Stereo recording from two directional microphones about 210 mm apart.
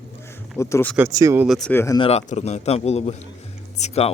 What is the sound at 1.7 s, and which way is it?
Speech, 15° left (ahead or behind).